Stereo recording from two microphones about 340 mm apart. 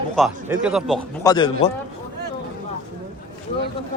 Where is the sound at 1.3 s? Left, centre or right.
Centre.